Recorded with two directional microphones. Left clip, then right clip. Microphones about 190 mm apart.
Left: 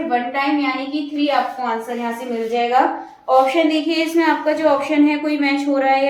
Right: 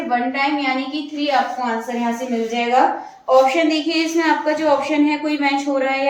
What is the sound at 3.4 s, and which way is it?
A woman's voice, 20° left (ahead or behind).